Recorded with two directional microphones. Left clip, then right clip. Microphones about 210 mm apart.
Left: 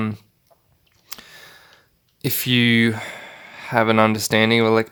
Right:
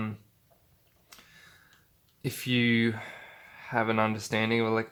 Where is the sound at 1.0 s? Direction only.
45° left (ahead or behind).